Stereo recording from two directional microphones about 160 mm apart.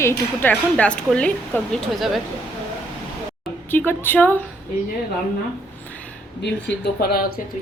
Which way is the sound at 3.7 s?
10° left (ahead or behind).